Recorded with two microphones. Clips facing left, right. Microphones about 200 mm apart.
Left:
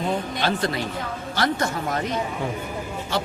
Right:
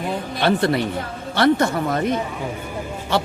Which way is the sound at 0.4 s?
60° right (ahead or behind).